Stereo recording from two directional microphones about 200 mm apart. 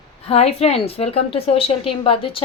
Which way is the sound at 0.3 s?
30° left (ahead or behind).